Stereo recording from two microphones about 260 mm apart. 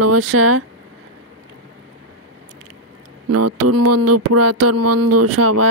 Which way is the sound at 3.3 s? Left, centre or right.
Right.